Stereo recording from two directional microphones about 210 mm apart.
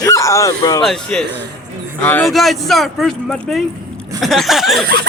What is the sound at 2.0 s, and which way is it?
Speech, 10° left (ahead or behind).